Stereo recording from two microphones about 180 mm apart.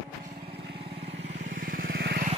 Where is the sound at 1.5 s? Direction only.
50° right (ahead or behind).